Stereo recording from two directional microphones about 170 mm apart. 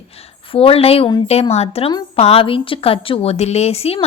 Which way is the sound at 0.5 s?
35° left (ahead or behind).